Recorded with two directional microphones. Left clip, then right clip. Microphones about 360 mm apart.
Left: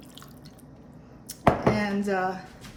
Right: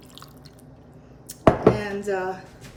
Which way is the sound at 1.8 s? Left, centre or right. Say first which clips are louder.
Even; centre.